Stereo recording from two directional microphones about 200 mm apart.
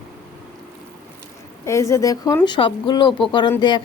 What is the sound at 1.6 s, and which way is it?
Speech, 15° left (ahead or behind).